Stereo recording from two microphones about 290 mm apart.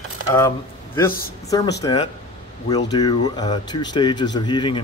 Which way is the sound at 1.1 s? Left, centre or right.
Left.